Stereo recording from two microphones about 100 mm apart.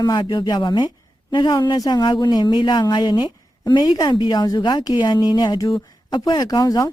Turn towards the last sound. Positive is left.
turn(degrees=35)  # may be behind; listen again after turning